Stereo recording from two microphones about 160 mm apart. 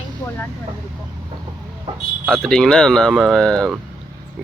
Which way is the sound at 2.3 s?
5° left (ahead or behind).